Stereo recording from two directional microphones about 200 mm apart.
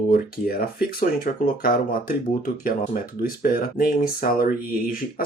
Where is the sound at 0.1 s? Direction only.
45° left (ahead or behind).